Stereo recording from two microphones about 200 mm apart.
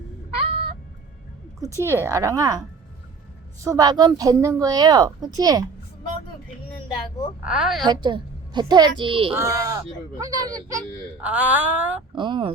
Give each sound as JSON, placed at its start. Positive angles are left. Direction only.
{"t": 1.6, "sound": "a woman's voice", "side_deg": -15}
{"t": 7.4, "sound": "a woman's voice", "side_deg": -5}
{"t": 7.9, "sound": "a woman's voice", "side_deg": -25}
{"t": 9.3, "sound": "speech", "side_deg": -15}
{"t": 12.1, "sound": "a woman's voice", "side_deg": -25}